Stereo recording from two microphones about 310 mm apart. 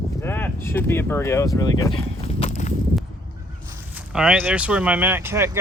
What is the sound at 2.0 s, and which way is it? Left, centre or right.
Walk, centre.